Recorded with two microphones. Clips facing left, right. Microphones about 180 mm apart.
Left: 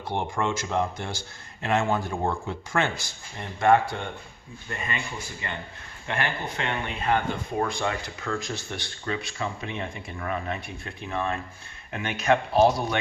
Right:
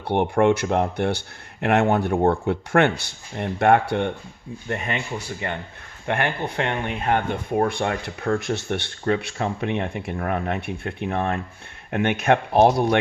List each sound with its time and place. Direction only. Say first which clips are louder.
0.0 s speech: right 9 dB; 60° right (ahead or behind)
6.1 s speech: right 5 dB; 60° right (ahead or behind)